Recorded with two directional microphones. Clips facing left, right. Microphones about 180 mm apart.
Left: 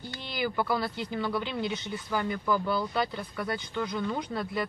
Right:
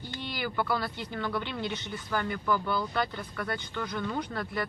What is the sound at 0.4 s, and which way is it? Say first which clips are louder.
Speech: left 2 dB; 10° left (ahead or behind).